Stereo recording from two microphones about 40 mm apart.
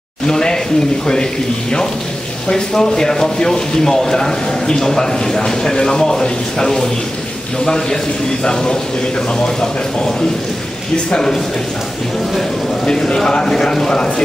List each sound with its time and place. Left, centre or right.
0.3 s speech: left
2.5 s speech: centre
11.1 s speech: centre
12.8 s speech: centre